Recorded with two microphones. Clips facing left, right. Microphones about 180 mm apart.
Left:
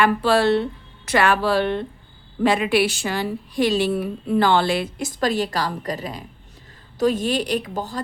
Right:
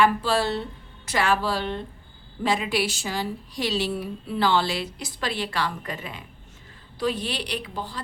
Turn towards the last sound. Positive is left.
turn(degrees=45)  # may be behind; listen again after turning